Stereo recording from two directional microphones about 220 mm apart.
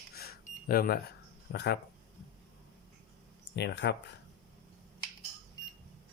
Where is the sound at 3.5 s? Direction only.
50° left (ahead or behind).